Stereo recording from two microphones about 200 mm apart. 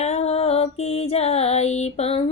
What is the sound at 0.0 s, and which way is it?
Music, 30° left (ahead or behind).